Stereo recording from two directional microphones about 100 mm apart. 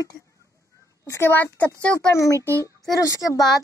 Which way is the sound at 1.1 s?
20° left (ahead or behind).